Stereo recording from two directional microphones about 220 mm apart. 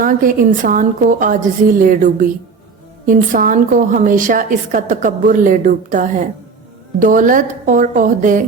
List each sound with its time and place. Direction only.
0.0 s a woman's voice: 40° right (ahead or behind)